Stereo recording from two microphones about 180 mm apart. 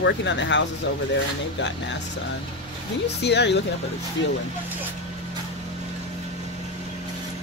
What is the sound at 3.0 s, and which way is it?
Speech, 70° left (ahead or behind).